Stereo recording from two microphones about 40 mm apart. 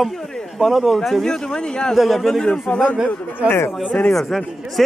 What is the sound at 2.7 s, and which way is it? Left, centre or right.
Speech, left.